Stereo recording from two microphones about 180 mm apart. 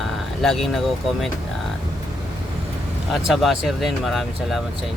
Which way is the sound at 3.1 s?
Centre (ahead or behind).